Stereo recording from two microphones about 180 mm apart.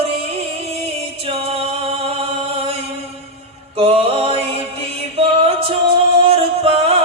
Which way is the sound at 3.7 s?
30° right (ahead or behind).